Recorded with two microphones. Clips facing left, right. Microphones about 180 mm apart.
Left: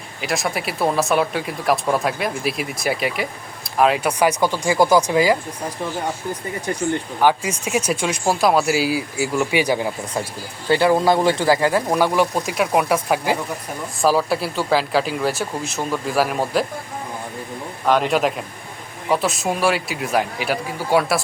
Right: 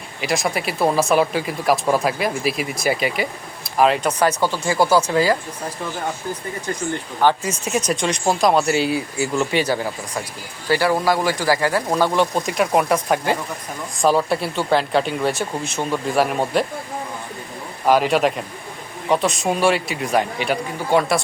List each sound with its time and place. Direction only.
0.2 s speech: centre (ahead or behind)
6.7 s speech: 15° left (ahead or behind); by 16.6 s centre (ahead or behind)
17.8 s speech: 5° right (ahead or behind)